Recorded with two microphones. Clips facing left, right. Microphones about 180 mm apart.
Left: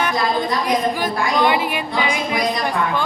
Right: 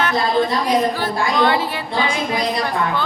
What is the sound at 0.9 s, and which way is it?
A man's voice, 15° left (ahead or behind).